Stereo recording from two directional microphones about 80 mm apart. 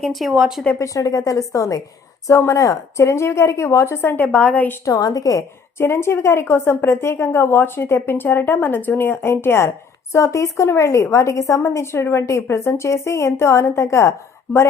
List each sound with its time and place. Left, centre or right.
0.0 s speech: centre
0.8 s a woman's voice: left
4.3 s a woman's voice: centre
4.9 s a woman's voice: left
5.7 s a woman's voice: left